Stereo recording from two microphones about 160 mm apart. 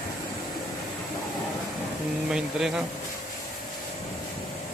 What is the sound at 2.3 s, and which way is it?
Speech, 5° right (ahead or behind).